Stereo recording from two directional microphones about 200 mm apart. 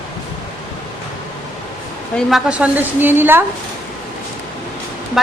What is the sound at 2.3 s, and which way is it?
A woman's voice, 5° right (ahead or behind).